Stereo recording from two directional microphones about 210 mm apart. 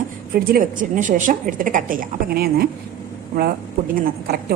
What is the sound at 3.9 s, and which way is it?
Speech, 45° right (ahead or behind).